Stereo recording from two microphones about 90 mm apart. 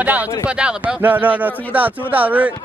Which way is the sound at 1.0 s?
20° right (ahead or behind).